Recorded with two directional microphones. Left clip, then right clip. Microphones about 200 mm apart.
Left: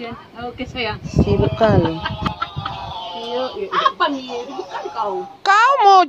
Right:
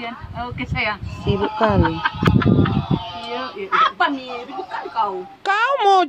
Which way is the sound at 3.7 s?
20° right (ahead or behind).